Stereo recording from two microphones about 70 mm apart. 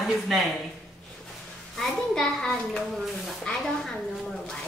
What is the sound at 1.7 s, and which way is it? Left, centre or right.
A woman's voice, centre.